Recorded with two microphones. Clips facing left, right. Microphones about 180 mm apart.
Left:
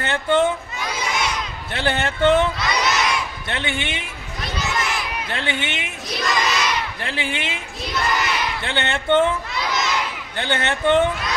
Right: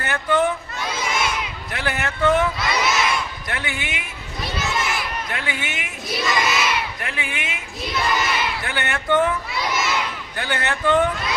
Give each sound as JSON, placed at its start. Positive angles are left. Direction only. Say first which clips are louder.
{"t": 0.0, "sound": "a child's voice", "louder": "left 2 dB", "side_deg": 25}
{"t": 0.9, "sound": "crowd", "louder": "even", "side_deg": -5}
{"t": 1.7, "sound": "speech", "louder": "left 4 dB", "side_deg": 30}
{"t": 2.6, "sound": "crowd", "louder": "even", "side_deg": -5}
{"t": 3.4, "sound": "speech", "louder": "left 3 dB", "side_deg": 25}
{"t": 4.7, "sound": "crowd", "louder": "even", "side_deg": -5}
{"t": 5.3, "sound": "speech", "louder": "left 3 dB", "side_deg": 30}
{"t": 6.1, "sound": "child singing", "louder": "even", "side_deg": -5}
{"t": 7.0, "sound": "speech", "louder": "left 3 dB", "side_deg": 30}
{"t": 7.9, "sound": "crowd", "louder": "even", "side_deg": 0}
{"t": 8.6, "sound": "speech", "louder": "left 5 dB", "side_deg": 25}
{"t": 9.5, "sound": "children playing", "louder": "even", "side_deg": -5}
{"t": 10.3, "sound": "speech", "louder": "left 3 dB", "side_deg": 25}